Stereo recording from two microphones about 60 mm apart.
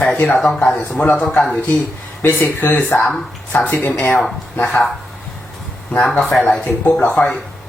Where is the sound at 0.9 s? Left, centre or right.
Left.